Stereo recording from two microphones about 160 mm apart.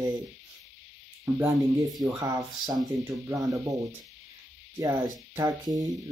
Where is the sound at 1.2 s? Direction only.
20° right (ahead or behind).